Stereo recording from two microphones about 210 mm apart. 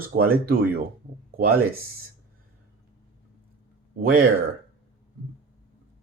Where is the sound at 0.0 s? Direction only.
45° right (ahead or behind).